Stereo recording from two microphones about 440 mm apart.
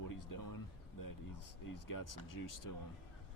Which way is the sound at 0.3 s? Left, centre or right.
Left.